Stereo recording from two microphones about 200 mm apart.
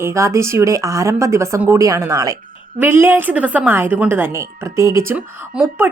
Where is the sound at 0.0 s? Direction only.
15° right (ahead or behind).